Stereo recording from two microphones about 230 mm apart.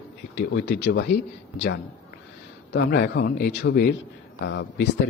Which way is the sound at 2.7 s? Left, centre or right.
Left.